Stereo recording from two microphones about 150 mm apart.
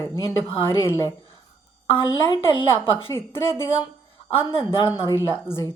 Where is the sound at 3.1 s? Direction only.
15° left (ahead or behind).